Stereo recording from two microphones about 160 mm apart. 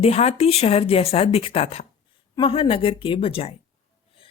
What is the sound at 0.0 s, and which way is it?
A woman's voice, 40° left (ahead or behind).